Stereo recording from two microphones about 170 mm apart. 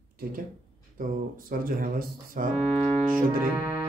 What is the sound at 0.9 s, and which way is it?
Speech, 55° right (ahead or behind).